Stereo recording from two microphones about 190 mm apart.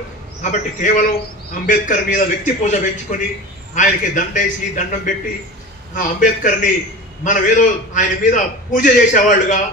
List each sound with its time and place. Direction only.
0.4 s a man's voice: 40° left (ahead or behind)